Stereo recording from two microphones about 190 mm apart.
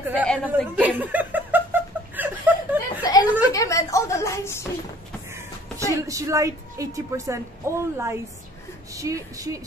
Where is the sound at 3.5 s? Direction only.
15° left (ahead or behind).